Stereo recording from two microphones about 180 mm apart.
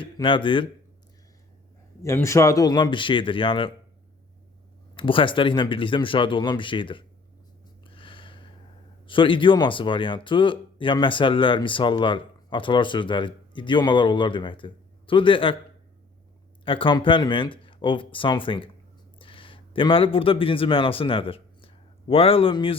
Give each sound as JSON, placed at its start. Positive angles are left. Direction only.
{"t": 0.0, "sound": "speech", "side_deg": 25}
{"t": 2.0, "sound": "speech", "side_deg": 15}
{"t": 4.9, "sound": "speech", "side_deg": 30}
{"t": 7.9, "sound": "a sound", "side_deg": 30}
{"t": 9.0, "sound": "speech", "side_deg": 30}
{"t": 16.6, "sound": "a man's voice", "side_deg": 30}